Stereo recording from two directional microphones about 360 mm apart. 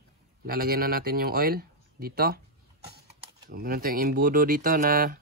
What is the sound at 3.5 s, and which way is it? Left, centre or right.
Speech, right.